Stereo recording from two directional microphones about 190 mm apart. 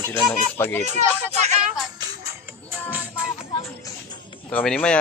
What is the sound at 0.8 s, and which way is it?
Speech, 35° right (ahead or behind).